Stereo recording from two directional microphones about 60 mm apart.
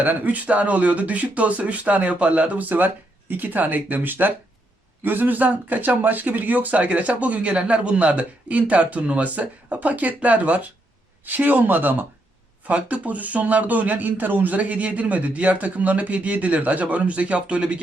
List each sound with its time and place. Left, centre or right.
0.0 s speech: right